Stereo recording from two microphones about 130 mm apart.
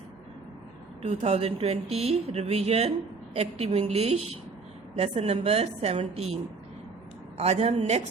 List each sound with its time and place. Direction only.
1.0 s a woman's voice: 50° right (ahead or behind)